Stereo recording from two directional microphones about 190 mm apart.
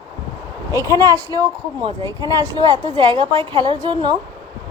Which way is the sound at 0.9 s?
20° right (ahead or behind).